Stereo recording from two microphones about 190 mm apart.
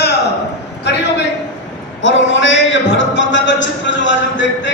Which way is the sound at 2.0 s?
75° left (ahead or behind).